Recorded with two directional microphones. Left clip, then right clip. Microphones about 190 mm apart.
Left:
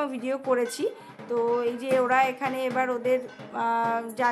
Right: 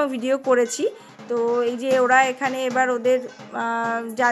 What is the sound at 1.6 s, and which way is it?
Speech, 20° right (ahead or behind).